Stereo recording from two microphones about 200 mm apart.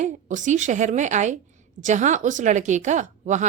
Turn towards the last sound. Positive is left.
turn(degrees=-35)  # may be behind; listen again after turning